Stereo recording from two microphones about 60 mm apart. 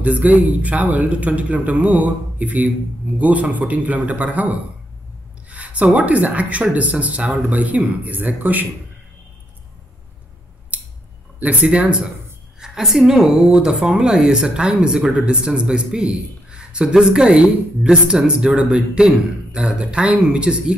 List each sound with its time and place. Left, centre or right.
0.0 s speech: right
10.7 s scissors: right
11.3 s a woman's voice: right